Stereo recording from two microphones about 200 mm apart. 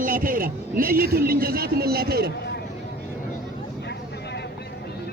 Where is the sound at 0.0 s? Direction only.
45° right (ahead or behind).